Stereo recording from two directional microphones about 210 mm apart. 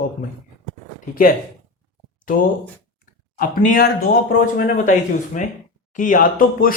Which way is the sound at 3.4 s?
40° left (ahead or behind).